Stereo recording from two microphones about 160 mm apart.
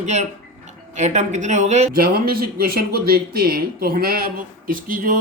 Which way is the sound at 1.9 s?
65° right (ahead or behind).